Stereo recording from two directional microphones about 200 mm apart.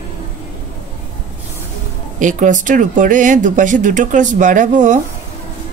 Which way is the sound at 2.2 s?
40° right (ahead or behind).